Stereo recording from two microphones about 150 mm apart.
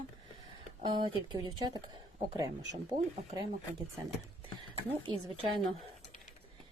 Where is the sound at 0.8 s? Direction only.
30° right (ahead or behind).